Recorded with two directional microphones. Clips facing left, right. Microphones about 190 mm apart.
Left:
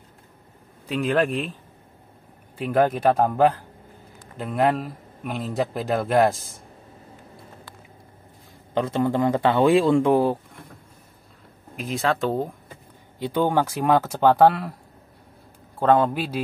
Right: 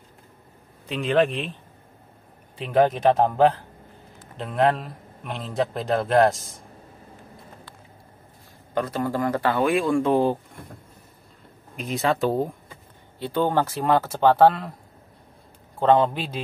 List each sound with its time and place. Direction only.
0.8 s speech: 5° left (ahead or behind)
2.5 s speech: 5° left (ahead or behind)
8.9 s speech: 25° left (ahead or behind)
10.1 s speech: 5° left (ahead or behind)
11.7 s speech: centre (ahead or behind)
13.2 s speech: 15° left (ahead or behind)
15.8 s speech: 5° left (ahead or behind)